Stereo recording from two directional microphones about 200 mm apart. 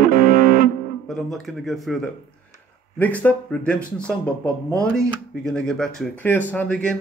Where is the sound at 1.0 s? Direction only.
Centre (ahead or behind).